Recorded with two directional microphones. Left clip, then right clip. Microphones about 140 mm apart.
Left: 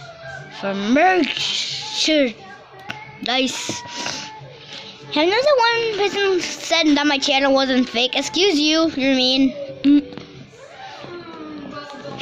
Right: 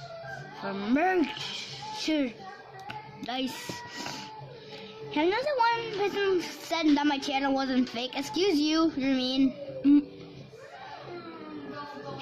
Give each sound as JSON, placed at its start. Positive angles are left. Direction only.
{"t": 0.6, "sound": "speech", "side_deg": 15}
{"t": 2.9, "sound": "music", "side_deg": 20}
{"t": 3.9, "sound": "music", "side_deg": 0}
{"t": 5.1, "sound": "a woman's voice", "side_deg": 15}